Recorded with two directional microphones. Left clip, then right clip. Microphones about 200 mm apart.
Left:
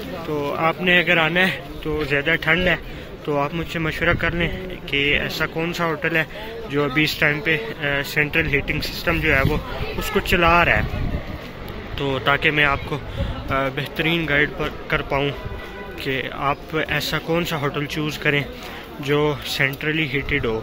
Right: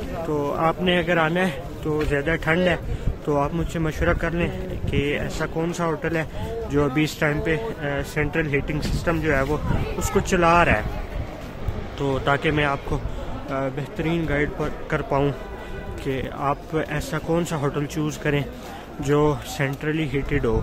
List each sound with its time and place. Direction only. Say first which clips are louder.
0.5 s a man's voice: left 4 dB; 15° right (ahead or behind)
10.2 s speech: left 2 dB; 20° right (ahead or behind)
12.0 s a man's voice: left 3 dB; 15° right (ahead or behind)
19.0 s speech: left 1 dB; 25° right (ahead or behind)